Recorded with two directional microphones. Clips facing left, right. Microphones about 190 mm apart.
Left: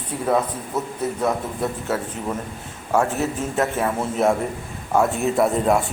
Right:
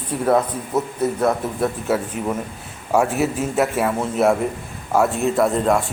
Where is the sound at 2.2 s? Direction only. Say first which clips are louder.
Right 3 dB; 10° right (ahead or behind).